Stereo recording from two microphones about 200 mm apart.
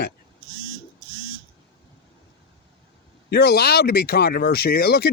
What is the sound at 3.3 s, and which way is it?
A man's voice, 55° left (ahead or behind).